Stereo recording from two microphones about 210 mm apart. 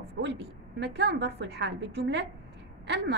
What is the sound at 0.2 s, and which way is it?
A woman's voice, 55° right (ahead or behind).